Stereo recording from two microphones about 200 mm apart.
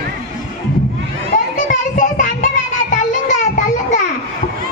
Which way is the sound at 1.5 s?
40° left (ahead or behind).